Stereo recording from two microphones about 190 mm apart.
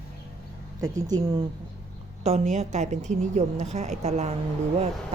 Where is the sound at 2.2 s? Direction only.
35° right (ahead or behind).